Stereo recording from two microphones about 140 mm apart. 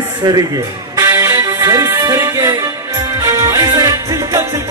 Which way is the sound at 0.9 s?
20° right (ahead or behind).